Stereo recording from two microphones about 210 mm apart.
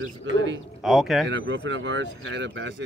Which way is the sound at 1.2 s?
60° right (ahead or behind).